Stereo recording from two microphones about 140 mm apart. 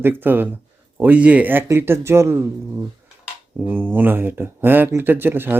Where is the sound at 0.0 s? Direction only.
15° right (ahead or behind).